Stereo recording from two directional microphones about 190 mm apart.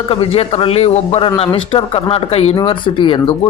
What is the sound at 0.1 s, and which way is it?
Speech, 30° left (ahead or behind).